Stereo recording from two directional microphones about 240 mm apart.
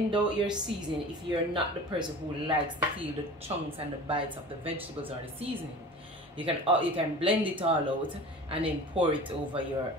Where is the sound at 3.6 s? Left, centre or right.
Right.